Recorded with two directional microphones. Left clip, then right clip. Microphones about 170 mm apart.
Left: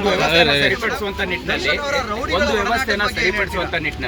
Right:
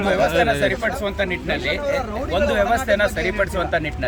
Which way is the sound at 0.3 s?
20° left (ahead or behind).